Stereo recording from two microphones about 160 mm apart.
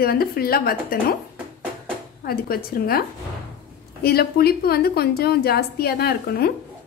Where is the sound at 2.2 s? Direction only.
70° left (ahead or behind).